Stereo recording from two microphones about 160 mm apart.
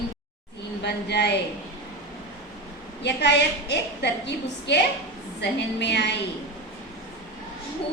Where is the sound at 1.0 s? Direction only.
90° left.